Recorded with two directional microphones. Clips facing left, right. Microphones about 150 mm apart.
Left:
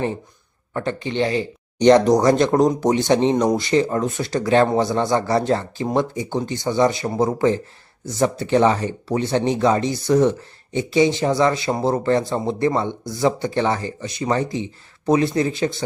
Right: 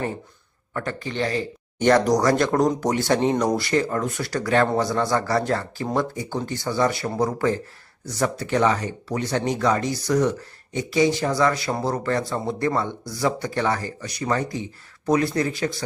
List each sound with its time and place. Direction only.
0.7 s speech: 25° left (ahead or behind)